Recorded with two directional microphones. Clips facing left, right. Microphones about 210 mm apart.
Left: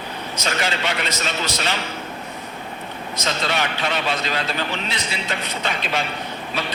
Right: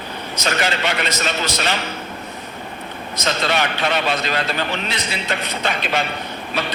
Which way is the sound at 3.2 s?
75° right (ahead or behind).